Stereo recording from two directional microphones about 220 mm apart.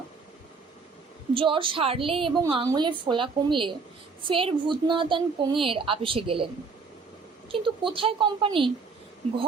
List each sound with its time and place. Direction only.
1.3 s a woman's voice: 25° right (ahead or behind)